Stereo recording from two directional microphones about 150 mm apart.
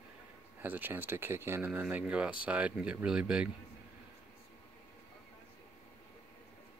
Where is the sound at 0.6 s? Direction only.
10° right (ahead or behind).